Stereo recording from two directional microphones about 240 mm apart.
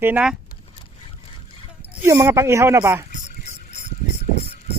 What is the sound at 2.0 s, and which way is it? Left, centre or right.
Speech, centre.